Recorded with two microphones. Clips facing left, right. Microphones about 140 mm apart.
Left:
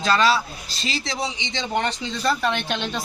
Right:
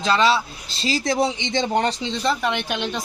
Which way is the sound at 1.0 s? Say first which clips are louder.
Right 7 dB; 50° right (ahead or behind).